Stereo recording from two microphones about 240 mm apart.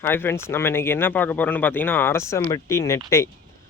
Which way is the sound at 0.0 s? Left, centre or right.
Centre.